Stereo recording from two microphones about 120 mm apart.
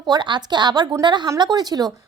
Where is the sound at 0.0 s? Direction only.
40° right (ahead or behind).